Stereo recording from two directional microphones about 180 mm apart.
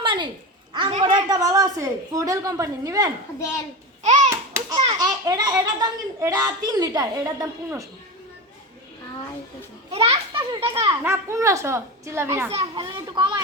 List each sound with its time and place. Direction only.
0.0 s a sound: 25° right (ahead or behind)
0.7 s a child's voice: 30° right (ahead or behind)
4.0 s babbling: 40° right (ahead or behind)
4.3 s babbling: 20° right (ahead or behind)
4.9 s a child's voice: 20° right (ahead or behind)
9.9 s a child's voice: 35° right (ahead or behind)
11.0 s a child's voice: 15° right (ahead or behind)
12.5 s a child's voice: 30° right (ahead or behind)